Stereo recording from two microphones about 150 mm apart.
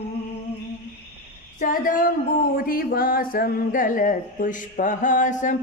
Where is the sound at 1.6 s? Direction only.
65° left (ahead or behind).